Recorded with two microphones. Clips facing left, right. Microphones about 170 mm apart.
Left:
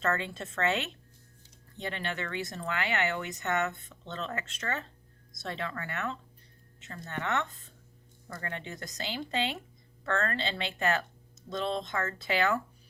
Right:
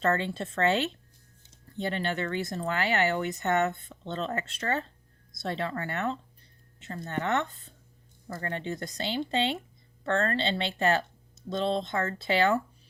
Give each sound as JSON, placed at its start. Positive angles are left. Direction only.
{"t": 0.0, "sound": "speech", "side_deg": -30}